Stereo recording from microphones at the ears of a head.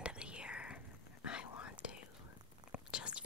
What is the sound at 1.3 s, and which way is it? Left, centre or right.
Whispering, left.